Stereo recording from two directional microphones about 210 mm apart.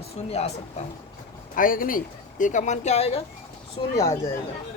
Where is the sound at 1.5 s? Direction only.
40° left (ahead or behind); by 3.9 s 20° left (ahead or behind).